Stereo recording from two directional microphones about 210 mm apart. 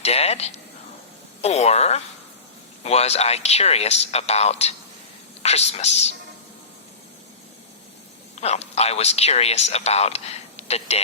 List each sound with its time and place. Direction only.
0.0 s a sound: 30° left (ahead or behind)
1.4 s a man's voice: 30° left (ahead or behind)
8.4 s speech: 30° left (ahead or behind)